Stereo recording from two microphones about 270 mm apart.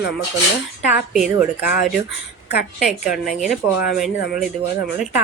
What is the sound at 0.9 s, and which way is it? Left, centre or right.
A woman's voice, centre.